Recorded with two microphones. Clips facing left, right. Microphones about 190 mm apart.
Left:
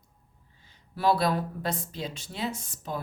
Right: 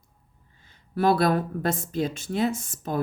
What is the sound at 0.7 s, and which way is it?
Speech, 50° right (ahead or behind).